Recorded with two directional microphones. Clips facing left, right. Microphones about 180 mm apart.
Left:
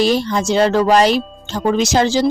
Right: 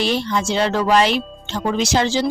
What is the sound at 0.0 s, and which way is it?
Speech, 40° left (ahead or behind).